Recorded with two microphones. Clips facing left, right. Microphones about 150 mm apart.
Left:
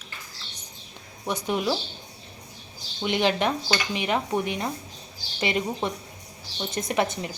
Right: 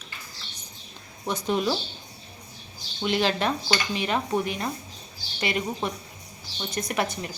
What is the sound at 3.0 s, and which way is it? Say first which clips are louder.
A woman's voice: left 1 dB; 20° left (ahead or behind).